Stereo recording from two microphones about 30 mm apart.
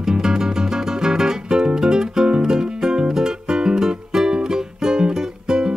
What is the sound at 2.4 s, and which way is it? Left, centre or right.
Music, right.